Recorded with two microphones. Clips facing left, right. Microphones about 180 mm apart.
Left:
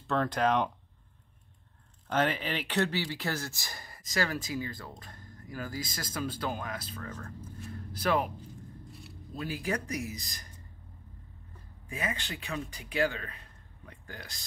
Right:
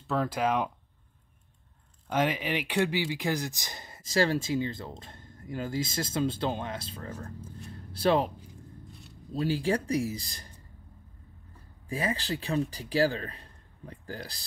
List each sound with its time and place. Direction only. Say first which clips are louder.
0.0 s speech: even; 5° right (ahead or behind)
2.0 s speech: right 1 dB; 10° right (ahead or behind); by 8.3 s 30° right (ahead or behind)
9.3 s speech: right 6 dB; 30° right (ahead or behind)
11.9 s speech: right 6 dB; 35° right (ahead or behind)